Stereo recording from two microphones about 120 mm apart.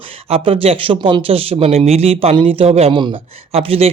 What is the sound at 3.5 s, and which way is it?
Speech, 60° right (ahead or behind).